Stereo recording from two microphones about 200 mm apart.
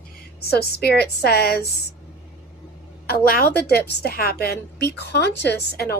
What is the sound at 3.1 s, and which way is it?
A woman's voice, 50° left (ahead or behind).